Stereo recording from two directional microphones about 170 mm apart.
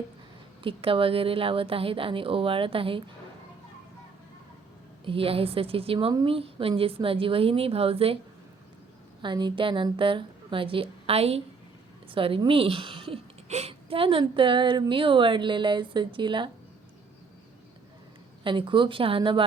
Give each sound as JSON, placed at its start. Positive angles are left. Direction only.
{"t": 0.6, "sound": "speech", "side_deg": -30}
{"t": 5.0, "sound": "speech", "side_deg": -35}
{"t": 9.2, "sound": "speech", "side_deg": -25}
{"t": 18.4, "sound": "speech", "side_deg": -30}